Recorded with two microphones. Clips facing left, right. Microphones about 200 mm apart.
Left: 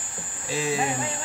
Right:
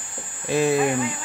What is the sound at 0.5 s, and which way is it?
Speech, 55° right (ahead or behind).